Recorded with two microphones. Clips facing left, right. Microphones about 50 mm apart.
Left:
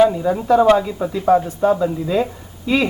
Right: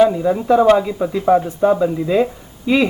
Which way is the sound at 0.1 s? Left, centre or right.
Centre.